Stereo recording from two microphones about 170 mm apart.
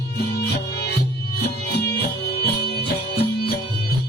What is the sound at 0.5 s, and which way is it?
Music, 75° left (ahead or behind).